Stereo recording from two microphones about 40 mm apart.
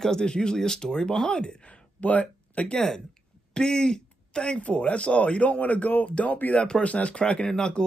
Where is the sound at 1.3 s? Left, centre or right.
Left.